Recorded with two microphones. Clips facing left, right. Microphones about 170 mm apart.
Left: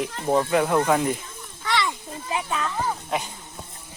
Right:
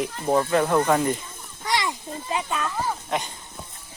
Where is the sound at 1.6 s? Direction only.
40° right (ahead or behind).